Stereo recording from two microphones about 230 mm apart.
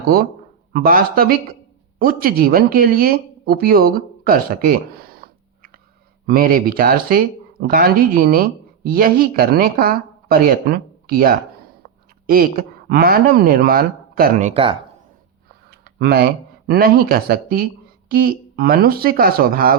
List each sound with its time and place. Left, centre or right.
0.7 s speech: right
16.0 s speech: right